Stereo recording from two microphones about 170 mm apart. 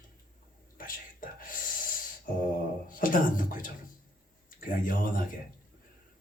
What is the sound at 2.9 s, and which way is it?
Speech, 55° left (ahead or behind).